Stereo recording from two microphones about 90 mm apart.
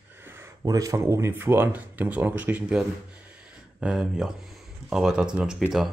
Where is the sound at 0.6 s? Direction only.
40° right (ahead or behind).